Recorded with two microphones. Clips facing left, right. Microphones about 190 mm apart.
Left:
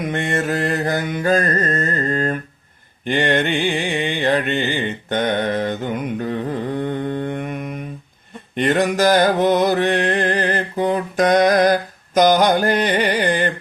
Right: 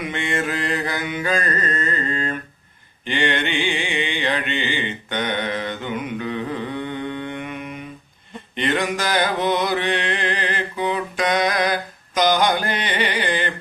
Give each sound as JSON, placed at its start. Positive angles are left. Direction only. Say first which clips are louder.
{"t": 0.0, "sound": "mantra", "louder": "left 3 dB", "side_deg": 45}